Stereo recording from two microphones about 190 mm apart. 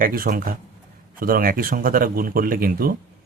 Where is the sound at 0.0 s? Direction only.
50° right (ahead or behind).